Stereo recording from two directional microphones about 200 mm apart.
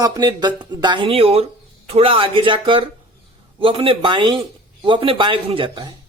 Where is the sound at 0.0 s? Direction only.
20° right (ahead or behind).